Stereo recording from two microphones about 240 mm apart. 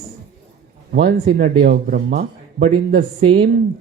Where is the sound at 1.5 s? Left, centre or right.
Right.